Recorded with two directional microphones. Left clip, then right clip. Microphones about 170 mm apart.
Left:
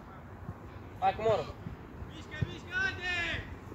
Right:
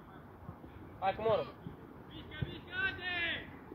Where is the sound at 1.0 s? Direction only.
50° left (ahead or behind).